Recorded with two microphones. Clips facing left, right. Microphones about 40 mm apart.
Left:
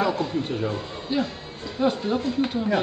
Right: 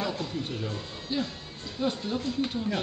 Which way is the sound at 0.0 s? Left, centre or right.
Centre.